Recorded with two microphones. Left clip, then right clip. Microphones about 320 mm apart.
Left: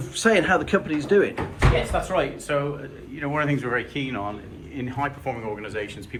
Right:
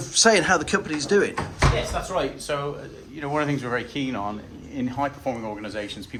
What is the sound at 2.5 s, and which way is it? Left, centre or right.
Speech, right.